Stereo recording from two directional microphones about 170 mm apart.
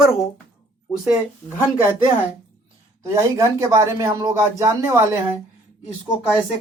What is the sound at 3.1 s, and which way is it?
Speech, 15° right (ahead or behind).